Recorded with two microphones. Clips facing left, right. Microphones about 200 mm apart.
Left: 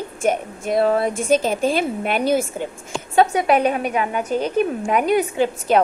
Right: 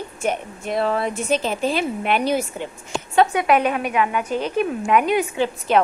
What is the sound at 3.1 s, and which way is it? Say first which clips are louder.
A woman's voice: left 1 dB; 35° left (ahead or behind).